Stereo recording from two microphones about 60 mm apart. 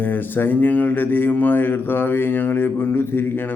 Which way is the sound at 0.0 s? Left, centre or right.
Left.